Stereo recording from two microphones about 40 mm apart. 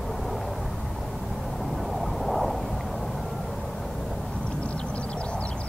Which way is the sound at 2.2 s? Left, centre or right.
Centre.